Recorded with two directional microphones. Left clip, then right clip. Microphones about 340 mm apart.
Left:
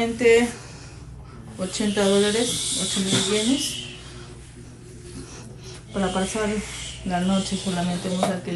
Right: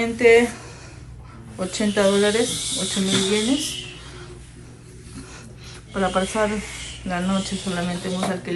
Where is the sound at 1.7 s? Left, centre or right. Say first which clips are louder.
Right 2 dB; centre.